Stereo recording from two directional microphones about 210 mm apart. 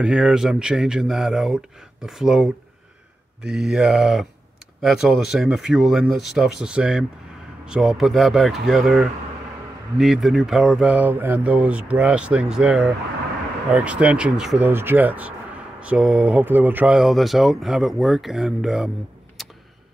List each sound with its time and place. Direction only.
0.0 s speech: 5° right (ahead or behind)